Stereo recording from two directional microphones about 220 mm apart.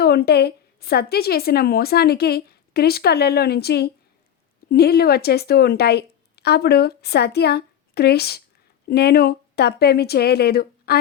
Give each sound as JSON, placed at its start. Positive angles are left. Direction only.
{"t": 0.0, "sound": "a woman's voice", "side_deg": 45}